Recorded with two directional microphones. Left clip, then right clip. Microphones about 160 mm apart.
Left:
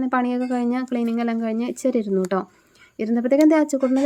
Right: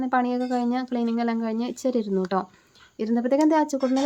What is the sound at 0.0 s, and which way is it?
A woman's voice, 20° left (ahead or behind).